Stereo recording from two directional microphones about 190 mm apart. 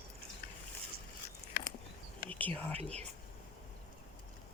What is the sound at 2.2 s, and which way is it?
Whispering, 10° left (ahead or behind).